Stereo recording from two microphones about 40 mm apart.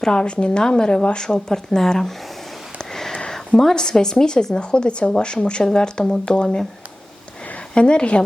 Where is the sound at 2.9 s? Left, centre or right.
Centre.